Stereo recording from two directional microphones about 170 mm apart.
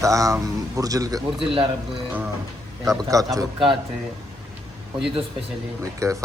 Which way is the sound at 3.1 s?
20° right (ahead or behind).